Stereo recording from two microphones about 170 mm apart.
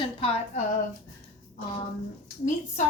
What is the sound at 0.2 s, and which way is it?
Speech, 35° left (ahead or behind).